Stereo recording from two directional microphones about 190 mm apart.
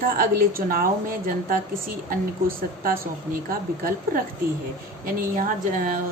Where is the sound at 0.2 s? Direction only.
50° right (ahead or behind).